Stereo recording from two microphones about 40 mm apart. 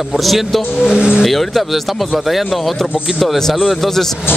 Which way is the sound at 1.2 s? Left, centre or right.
Centre.